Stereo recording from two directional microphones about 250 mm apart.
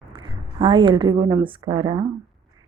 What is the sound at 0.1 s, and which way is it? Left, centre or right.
A woman's voice, centre.